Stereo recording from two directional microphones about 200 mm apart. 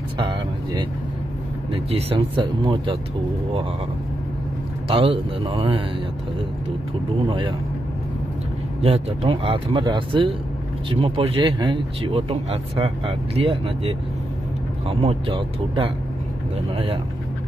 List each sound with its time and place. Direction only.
0.2 s vehicle: 25° right (ahead or behind)
1.7 s speech: 30° right (ahead or behind)
4.8 s speech: 25° right (ahead or behind)
7.2 s speech: 25° right (ahead or behind)
8.8 s speech: 30° right (ahead or behind)